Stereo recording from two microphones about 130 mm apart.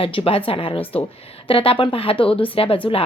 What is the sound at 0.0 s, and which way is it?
A woman's voice, 45° left (ahead or behind).